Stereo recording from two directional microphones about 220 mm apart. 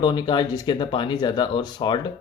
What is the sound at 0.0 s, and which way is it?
Speech, 20° left (ahead or behind).